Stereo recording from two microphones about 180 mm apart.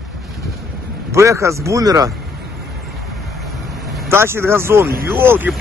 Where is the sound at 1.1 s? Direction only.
15° right (ahead or behind).